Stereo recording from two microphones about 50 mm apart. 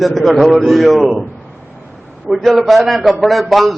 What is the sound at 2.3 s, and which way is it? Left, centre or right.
A man's voice, centre.